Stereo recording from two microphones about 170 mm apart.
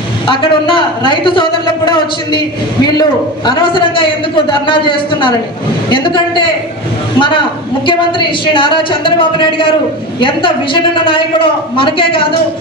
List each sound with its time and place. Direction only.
0.3 s a man's voice: 30° left (ahead or behind)